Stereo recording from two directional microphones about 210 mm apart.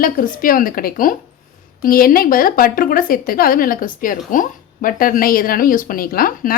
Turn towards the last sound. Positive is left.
turn(degrees=45)  # may be behind; listen again after turning